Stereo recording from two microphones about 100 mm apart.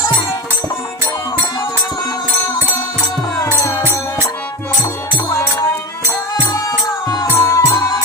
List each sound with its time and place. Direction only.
5.3 s music: 30° left (ahead or behind)
7.2 s music: 30° left (ahead or behind)